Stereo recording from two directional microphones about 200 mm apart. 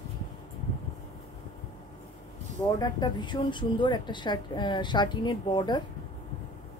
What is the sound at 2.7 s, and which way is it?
Speech, 20° left (ahead or behind).